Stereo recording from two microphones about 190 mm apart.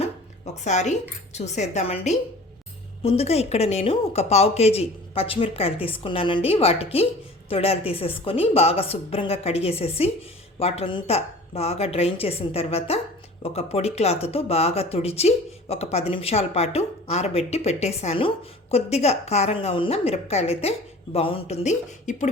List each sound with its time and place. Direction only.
0.0 s speech: 35° left (ahead or behind)